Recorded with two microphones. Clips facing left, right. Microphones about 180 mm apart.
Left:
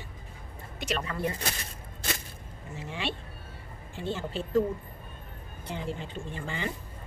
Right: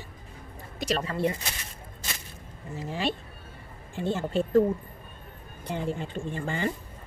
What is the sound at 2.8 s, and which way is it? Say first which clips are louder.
Speech: right 5 dB; 40° right (ahead or behind).